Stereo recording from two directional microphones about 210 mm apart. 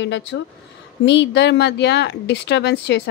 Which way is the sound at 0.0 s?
60° left (ahead or behind).